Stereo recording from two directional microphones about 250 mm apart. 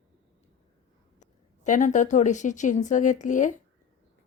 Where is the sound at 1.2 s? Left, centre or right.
Left.